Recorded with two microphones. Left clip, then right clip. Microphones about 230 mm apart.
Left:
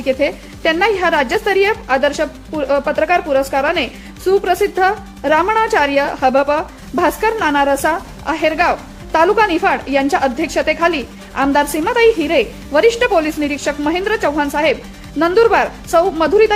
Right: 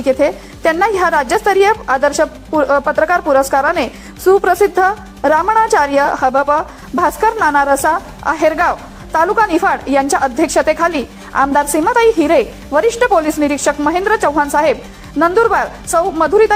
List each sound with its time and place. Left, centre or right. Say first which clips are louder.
0.1 s a woman's voice: right 3 dB; centre